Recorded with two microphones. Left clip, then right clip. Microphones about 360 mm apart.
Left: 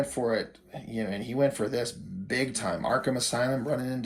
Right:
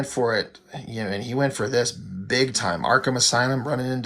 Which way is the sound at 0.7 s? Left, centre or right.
Right.